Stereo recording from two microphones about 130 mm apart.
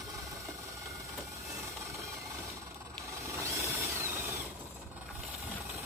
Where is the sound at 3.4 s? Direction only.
20° right (ahead or behind).